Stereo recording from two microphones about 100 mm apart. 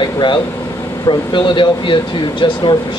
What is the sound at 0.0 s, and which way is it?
Air conditioning, 50° left (ahead or behind).